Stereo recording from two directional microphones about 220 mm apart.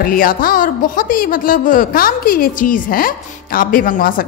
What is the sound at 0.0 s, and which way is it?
A woman's voice, 40° left (ahead or behind).